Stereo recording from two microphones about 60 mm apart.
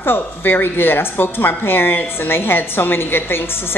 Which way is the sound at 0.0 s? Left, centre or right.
Left.